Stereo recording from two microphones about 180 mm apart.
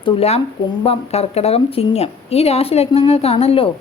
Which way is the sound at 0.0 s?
35° left (ahead or behind).